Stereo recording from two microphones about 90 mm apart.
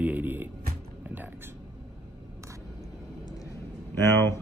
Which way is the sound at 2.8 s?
45° left (ahead or behind).